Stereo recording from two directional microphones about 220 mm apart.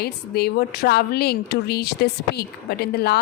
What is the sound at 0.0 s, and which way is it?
A woman's voice, 45° left (ahead or behind).